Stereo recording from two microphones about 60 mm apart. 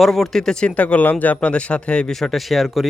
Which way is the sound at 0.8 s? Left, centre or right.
Left.